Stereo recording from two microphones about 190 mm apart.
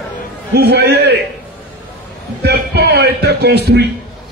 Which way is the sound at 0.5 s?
60° right (ahead or behind).